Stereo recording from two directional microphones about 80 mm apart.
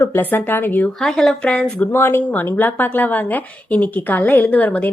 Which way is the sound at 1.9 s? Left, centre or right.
Left.